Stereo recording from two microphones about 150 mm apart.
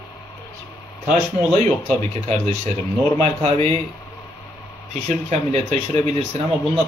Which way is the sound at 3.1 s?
40° right (ahead or behind).